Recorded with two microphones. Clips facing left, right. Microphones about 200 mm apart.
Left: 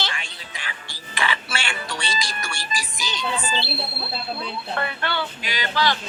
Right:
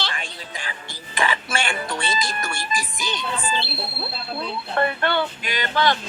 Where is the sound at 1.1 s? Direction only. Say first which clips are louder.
Right 3 dB; 45° right (ahead or behind).